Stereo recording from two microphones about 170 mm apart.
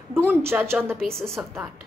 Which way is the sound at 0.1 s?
15° right (ahead or behind).